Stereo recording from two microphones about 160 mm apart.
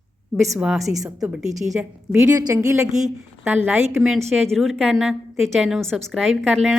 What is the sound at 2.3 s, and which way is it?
A woman's voice, 20° right (ahead or behind).